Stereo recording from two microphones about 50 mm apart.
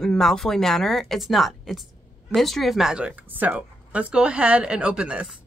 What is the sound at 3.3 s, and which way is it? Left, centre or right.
Speech, right.